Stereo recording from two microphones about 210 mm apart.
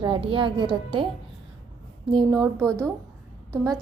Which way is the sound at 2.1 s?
20° right (ahead or behind).